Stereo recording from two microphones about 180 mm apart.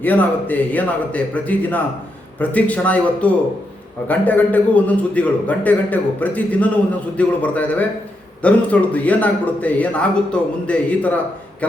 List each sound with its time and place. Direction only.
0.0 s a man's voice: 10° left (ahead or behind)